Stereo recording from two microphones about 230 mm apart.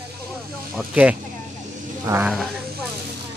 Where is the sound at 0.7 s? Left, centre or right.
Centre.